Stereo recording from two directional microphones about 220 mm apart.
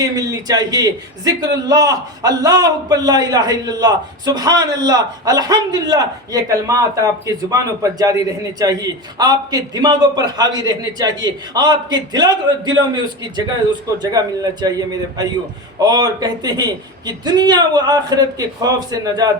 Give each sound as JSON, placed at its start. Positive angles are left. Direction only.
{"t": 0.0, "sound": "a man's voice", "side_deg": -15}